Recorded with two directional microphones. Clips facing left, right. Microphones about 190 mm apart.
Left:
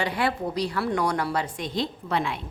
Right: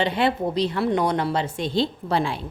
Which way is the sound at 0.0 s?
25° right (ahead or behind).